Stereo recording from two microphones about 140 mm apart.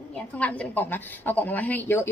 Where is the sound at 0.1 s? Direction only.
10° left (ahead or behind).